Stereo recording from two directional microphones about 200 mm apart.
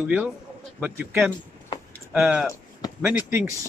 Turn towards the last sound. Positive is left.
turn(degrees=-10)  # may be behind; listen again after turning